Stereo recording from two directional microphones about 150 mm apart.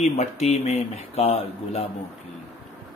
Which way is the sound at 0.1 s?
45° left (ahead or behind).